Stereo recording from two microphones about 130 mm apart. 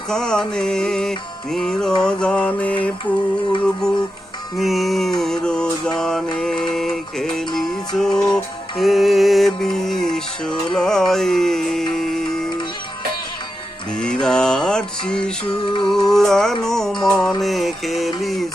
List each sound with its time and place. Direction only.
0.1 s music: 5° left (ahead or behind)
2.0 s mantra: 5° left (ahead or behind)
3.6 s music: 5° left (ahead or behind)
5.2 s mantra: 5° left (ahead or behind)
6.4 s music: 5° left (ahead or behind)
13.9 s mantra: 5° left (ahead or behind)
15.6 s music: 40° left (ahead or behind)
16.1 s music: 5° left (ahead or behind)